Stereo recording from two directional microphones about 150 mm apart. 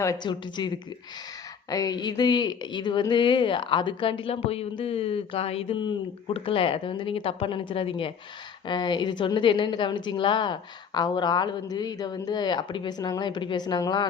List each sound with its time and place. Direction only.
0.0 s a woman's voice: 25° left (ahead or behind)
1.7 s a woman's voice: 25° left (ahead or behind)